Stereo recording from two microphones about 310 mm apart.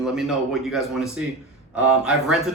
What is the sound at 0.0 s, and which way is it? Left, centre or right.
Speech, centre.